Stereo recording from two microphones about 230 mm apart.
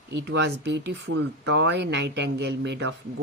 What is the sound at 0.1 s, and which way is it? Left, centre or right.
Speech, right.